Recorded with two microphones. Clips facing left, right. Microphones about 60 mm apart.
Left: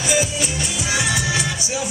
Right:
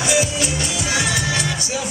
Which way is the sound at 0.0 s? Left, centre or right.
Centre.